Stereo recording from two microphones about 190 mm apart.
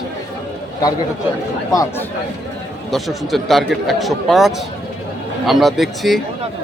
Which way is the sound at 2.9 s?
Centre (ahead or behind).